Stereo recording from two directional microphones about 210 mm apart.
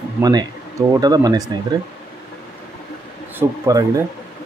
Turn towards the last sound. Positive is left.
turn(degrees=-15)  # may be behind; listen again after turning